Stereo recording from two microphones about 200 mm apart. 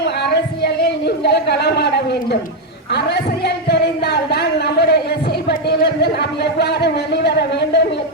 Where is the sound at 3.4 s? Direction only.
55° left (ahead or behind).